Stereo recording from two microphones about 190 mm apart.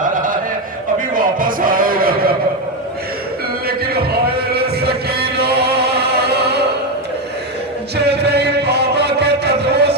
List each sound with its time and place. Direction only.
1.1 s music: 45° right (ahead or behind)
3.7 s a sound: 55° right (ahead or behind)
7.9 s music: 60° right (ahead or behind)